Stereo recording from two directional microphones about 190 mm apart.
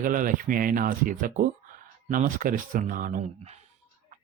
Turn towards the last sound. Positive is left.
turn(degrees=-35)  # may be behind; listen again after turning